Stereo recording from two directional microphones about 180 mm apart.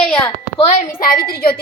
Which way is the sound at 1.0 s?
55° left (ahead or behind).